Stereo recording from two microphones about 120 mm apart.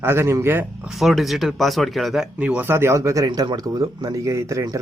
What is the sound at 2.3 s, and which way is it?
Speech, 10° right (ahead or behind).